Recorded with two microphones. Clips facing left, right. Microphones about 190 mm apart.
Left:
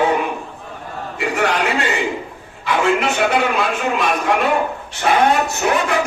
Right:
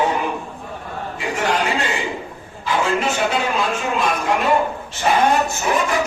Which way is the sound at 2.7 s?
65° left (ahead or behind).